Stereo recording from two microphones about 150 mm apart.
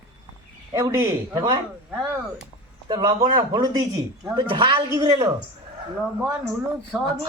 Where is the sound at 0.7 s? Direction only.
15° right (ahead or behind).